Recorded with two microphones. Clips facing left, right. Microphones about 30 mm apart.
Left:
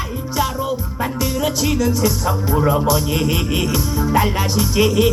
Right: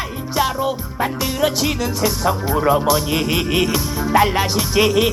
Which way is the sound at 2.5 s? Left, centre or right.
Centre.